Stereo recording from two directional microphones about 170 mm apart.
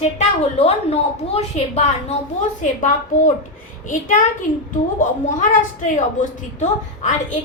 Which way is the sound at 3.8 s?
50° left (ahead or behind).